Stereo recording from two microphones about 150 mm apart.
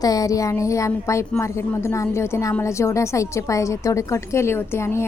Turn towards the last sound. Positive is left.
turn(degrees=15)  # may be behind; listen again after turning